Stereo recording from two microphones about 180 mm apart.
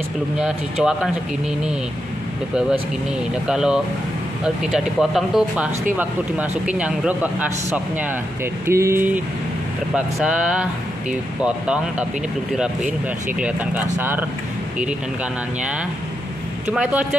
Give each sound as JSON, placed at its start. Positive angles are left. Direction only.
{"t": 0.4, "sound": "speech", "side_deg": -5}
{"t": 3.4, "sound": "speech", "side_deg": -5}
{"t": 13.4, "sound": "speech", "side_deg": -10}
{"t": 16.7, "sound": "speech", "side_deg": -5}